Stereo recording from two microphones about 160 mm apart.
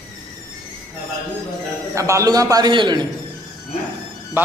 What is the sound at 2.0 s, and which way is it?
A man's voice, 20° right (ahead or behind).